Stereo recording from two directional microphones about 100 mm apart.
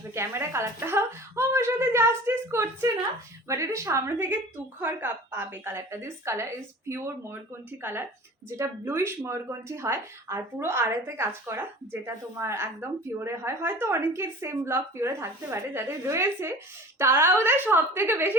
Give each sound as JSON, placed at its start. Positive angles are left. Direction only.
{"t": 0.1, "sound": "speech", "side_deg": -25}